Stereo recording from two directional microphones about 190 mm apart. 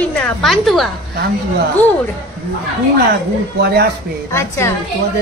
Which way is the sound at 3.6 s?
60° right (ahead or behind).